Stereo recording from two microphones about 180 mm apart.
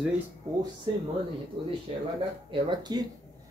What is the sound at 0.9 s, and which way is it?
Speech, 25° right (ahead or behind).